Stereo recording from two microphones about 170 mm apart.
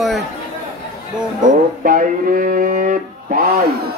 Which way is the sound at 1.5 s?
50° right (ahead or behind).